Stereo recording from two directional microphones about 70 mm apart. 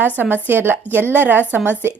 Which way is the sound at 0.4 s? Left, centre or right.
Right.